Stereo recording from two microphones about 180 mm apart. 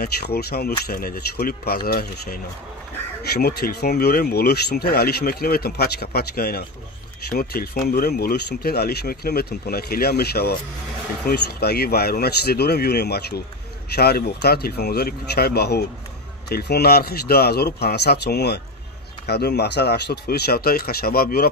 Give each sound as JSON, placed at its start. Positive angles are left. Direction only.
{"t": 0.0, "sound": "speech", "side_deg": 60}